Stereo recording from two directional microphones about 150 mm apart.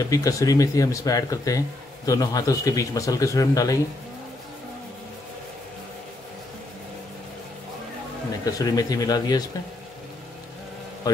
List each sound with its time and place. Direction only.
0.0 s a man's voice: 25° left (ahead or behind)
8.5 s a man's voice: 25° left (ahead or behind)